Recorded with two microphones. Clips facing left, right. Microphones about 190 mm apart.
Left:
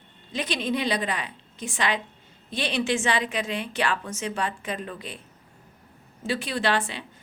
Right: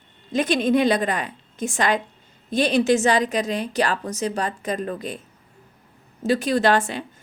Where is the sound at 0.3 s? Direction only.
50° right (ahead or behind).